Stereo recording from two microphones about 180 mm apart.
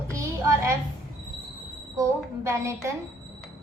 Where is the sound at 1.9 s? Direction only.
15° right (ahead or behind).